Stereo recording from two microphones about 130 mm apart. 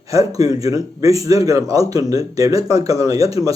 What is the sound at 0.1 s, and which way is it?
Speech, 25° right (ahead or behind).